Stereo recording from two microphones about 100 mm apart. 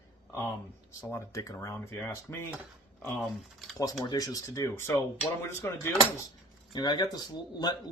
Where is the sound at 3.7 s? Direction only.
40° left (ahead or behind).